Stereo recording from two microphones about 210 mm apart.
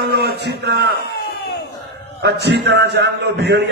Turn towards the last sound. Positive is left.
turn(degrees=-55)  # may be behind; listen again after turning